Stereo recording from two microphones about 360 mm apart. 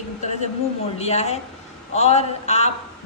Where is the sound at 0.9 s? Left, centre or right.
Centre.